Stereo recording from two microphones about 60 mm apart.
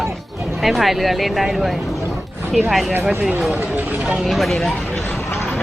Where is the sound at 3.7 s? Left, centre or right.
Right.